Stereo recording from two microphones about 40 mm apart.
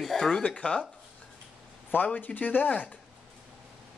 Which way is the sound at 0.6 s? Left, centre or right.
Left.